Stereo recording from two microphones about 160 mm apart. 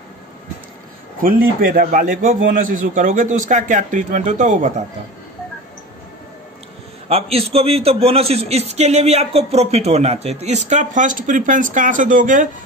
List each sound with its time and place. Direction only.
1.2 s a man's voice: 60° right (ahead or behind)
7.1 s a man's voice: 40° right (ahead or behind); by 12.4 s 55° right (ahead or behind)